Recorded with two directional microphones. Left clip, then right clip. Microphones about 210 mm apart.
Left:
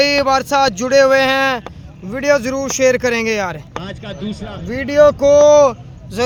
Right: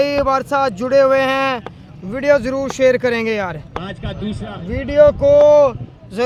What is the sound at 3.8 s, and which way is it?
A man's voice, 20° left (ahead or behind).